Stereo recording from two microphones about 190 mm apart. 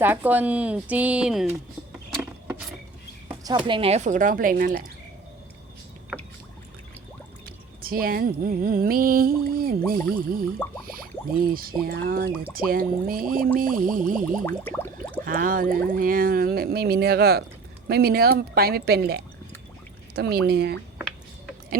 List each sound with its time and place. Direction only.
0.0 s speech: 10° right (ahead or behind)
2.0 s vehicle: centre (ahead or behind)
3.4 s speech: 25° right (ahead or behind); by 4.8 s 50° right (ahead or behind)
7.4 s speech: 50° right (ahead or behind)
14.4 s a sound: 10° left (ahead or behind)
15.2 s speech: 45° right (ahead or behind)